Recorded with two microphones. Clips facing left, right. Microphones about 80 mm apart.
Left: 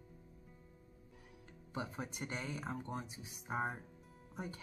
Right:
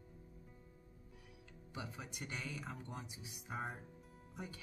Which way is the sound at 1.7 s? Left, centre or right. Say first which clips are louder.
Left 5 dB; left.